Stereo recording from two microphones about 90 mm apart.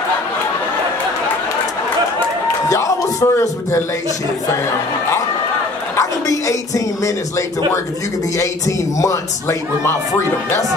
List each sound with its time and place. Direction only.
2.7 s music: 35° left (ahead or behind)
5.9 s a man's voice: 35° left (ahead or behind)